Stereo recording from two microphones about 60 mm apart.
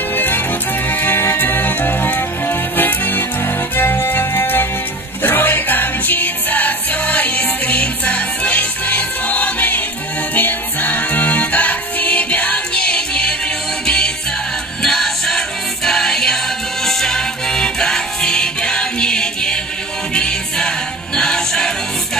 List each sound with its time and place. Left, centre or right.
0.1 s music: left; by 21.7 s centre